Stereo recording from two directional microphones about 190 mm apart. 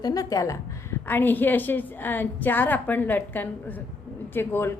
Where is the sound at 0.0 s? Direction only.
20° left (ahead or behind).